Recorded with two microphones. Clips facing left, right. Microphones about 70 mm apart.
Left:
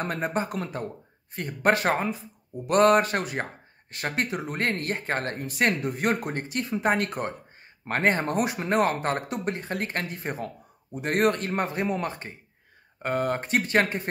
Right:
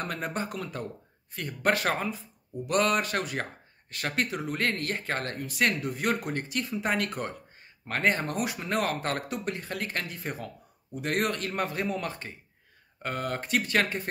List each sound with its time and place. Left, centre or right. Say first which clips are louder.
0.0 s speech: left 5 dB; left